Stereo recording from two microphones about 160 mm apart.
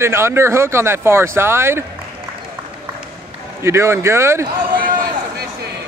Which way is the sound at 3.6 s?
15° right (ahead or behind).